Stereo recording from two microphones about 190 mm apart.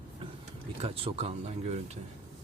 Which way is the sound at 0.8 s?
30° right (ahead or behind).